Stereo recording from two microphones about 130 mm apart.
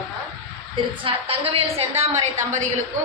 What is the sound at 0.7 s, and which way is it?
A woman's voice, 45° right (ahead or behind).